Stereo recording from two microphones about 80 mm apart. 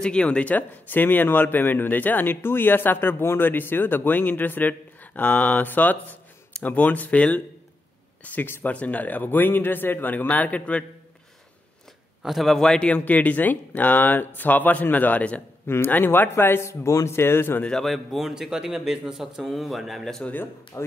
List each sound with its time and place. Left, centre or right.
0.0 s speech: centre
12.2 s speech: centre
15.6 s speech: left
17.6 s a man's voice: centre
20.7 s speech: left